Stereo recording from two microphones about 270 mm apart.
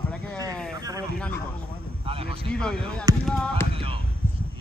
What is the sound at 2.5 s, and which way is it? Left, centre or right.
Speech, centre.